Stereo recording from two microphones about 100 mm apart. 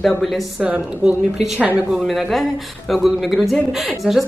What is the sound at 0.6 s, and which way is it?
A woman's voice, 15° right (ahead or behind).